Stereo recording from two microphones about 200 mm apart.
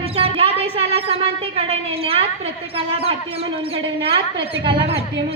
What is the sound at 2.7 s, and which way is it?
Speech, 30° right (ahead or behind).